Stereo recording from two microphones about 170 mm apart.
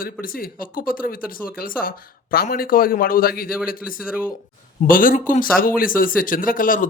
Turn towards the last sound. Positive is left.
turn(degrees=55)  # may be behind; listen again after turning